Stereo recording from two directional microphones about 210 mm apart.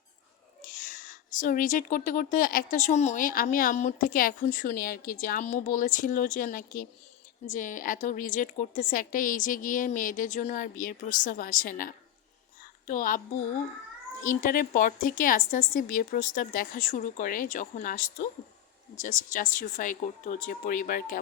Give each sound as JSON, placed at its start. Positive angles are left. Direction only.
{"t": 0.6, "sound": "a woman's voice", "side_deg": 40}